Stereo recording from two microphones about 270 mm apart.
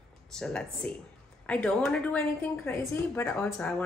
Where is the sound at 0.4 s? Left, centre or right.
Centre.